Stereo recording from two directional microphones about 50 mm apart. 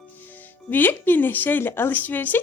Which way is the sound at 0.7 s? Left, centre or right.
Left.